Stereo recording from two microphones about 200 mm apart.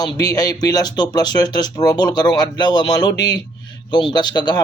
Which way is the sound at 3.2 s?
65° left (ahead or behind).